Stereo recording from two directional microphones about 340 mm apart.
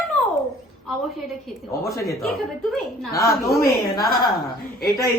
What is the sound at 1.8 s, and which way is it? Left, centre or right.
A woman's voice, centre.